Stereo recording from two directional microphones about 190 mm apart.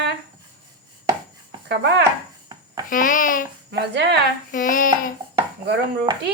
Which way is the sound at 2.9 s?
45° left (ahead or behind).